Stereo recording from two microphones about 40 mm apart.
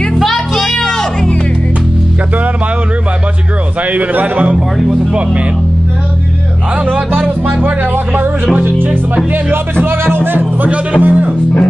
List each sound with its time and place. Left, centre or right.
0.2 s a sound: centre
0.7 s music: centre
3.8 s a man's voice: right
7.1 s music: right
10.2 s music: right
11.0 s music: right